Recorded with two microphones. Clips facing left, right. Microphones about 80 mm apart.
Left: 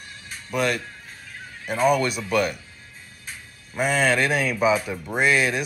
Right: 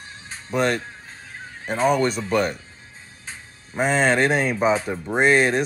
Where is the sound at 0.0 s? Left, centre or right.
Right.